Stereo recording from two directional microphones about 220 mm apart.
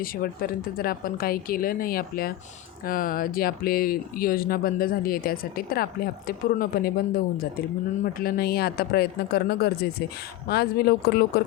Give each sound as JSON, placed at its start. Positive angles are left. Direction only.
{"t": 0.0, "sound": "speech", "side_deg": 40}